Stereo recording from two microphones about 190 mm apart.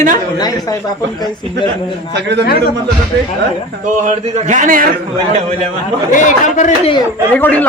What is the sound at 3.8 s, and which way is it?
Speech, 40° right (ahead or behind).